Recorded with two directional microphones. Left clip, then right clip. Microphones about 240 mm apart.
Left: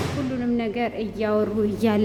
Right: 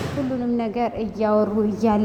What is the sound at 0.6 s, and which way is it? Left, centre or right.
A woman's voice, centre.